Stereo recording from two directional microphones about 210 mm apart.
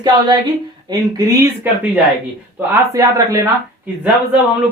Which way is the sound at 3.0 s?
15° right (ahead or behind).